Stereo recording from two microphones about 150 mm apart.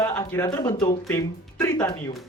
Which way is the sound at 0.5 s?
30° left (ahead or behind).